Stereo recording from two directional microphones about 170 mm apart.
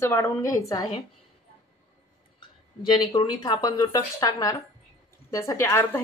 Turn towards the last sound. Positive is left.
turn(degrees=15)  # may be behind; listen again after turning